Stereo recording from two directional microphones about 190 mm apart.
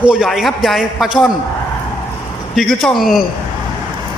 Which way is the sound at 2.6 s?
Centre (ahead or behind).